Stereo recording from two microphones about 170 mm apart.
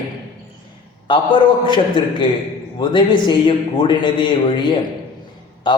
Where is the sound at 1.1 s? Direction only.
30° left (ahead or behind).